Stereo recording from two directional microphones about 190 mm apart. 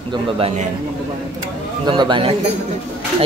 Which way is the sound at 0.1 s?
30° right (ahead or behind).